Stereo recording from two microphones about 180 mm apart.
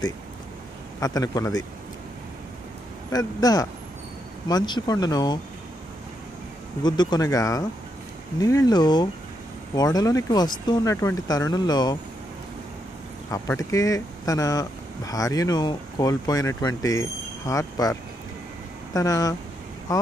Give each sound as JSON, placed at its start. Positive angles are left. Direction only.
{"t": 1.0, "sound": "speech", "side_deg": 20}
{"t": 3.1, "sound": "speech", "side_deg": 20}
{"t": 6.8, "sound": "speech", "side_deg": 25}
{"t": 13.3, "sound": "speech", "side_deg": 20}
{"t": 18.9, "sound": "speech", "side_deg": 20}